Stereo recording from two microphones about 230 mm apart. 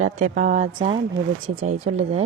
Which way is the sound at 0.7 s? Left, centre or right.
Right.